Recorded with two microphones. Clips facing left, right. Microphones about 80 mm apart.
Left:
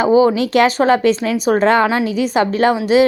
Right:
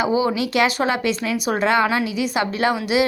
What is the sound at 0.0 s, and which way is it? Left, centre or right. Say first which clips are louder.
A woman's voice: left 7 dB; left.